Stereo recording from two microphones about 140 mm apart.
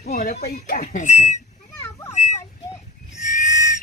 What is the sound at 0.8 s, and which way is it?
Speech, 60° left (ahead or behind).